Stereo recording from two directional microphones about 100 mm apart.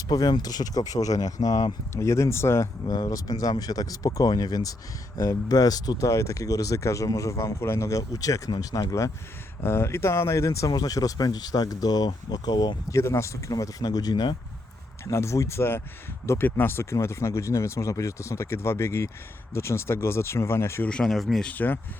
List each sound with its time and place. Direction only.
0.1 s speech: 45° left (ahead or behind)
1.9 s speech: 30° left (ahead or behind)
2.8 s speech: 40° left (ahead or behind)
9.6 s speech: 25° left (ahead or behind); by 12.7 s 45° left (ahead or behind)
12.9 s speech: 25° left (ahead or behind); by 14.3 s 45° left (ahead or behind)
15.0 s speech: 30° left (ahead or behind)
20.8 s speech: 5° left (ahead or behind)
21.4 s speech: 15° left (ahead or behind)